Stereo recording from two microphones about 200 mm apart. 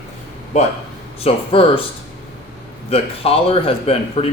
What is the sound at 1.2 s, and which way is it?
Speech, 25° left (ahead or behind).